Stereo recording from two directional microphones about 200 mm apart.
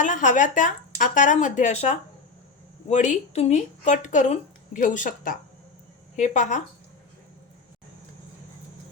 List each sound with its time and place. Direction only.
0.0 s speech: 40° left (ahead or behind)